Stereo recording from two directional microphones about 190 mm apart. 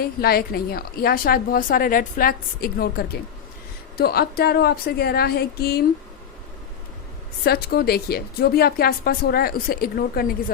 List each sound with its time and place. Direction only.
0.0 s a woman's voice: 55° left (ahead or behind)
7.4 s a woman's voice: 55° left (ahead or behind)